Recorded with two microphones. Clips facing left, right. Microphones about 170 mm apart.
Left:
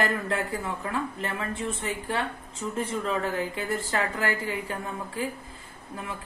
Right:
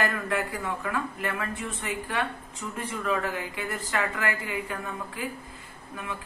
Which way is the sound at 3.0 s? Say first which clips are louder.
Right 3 dB; 30° left (ahead or behind).